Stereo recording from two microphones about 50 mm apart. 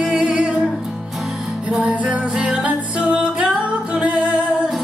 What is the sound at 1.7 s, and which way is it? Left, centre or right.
Music, right.